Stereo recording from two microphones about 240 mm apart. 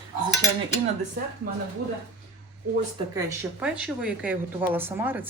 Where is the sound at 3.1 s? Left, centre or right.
Centre.